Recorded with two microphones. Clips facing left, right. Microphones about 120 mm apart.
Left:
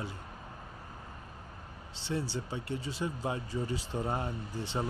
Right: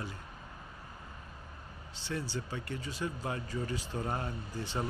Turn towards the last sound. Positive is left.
turn(degrees=20)  # may be behind; listen again after turning